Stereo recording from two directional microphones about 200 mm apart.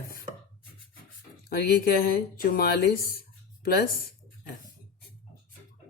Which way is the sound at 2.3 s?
45° left (ahead or behind).